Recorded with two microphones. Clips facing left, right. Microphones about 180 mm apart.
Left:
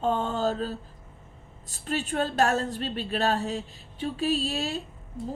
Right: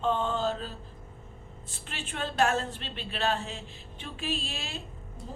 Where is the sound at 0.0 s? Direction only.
40° left (ahead or behind).